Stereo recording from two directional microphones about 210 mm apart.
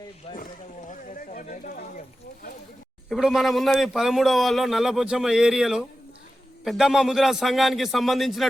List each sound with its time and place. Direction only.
0.3 s speech: 25° left (ahead or behind)
0.9 s a sound: 40° left (ahead or behind)
3.1 s a man's voice: centre (ahead or behind)